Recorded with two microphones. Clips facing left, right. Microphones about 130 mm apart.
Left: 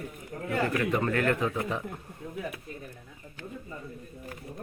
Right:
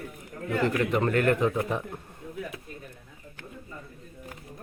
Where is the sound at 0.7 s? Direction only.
20° right (ahead or behind).